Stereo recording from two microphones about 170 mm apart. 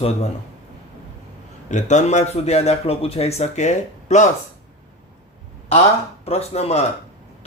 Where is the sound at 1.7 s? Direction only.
45° left (ahead or behind).